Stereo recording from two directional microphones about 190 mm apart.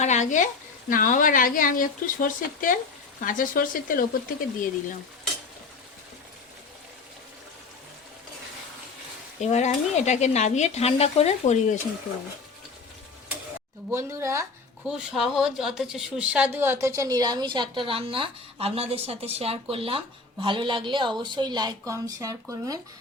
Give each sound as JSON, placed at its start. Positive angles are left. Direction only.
{"t": 0.0, "sound": "speech", "side_deg": 40}
{"t": 9.4, "sound": "speech", "side_deg": 35}
{"t": 13.9, "sound": "speech", "side_deg": -15}
{"t": 14.8, "sound": "speech", "side_deg": -5}